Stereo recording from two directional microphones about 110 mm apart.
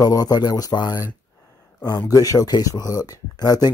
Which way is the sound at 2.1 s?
35° left (ahead or behind).